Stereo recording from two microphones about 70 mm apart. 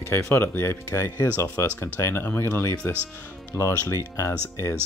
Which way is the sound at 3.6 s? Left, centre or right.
Left.